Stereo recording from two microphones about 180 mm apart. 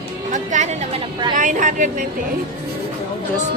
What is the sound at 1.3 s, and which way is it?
Speech, 45° right (ahead or behind).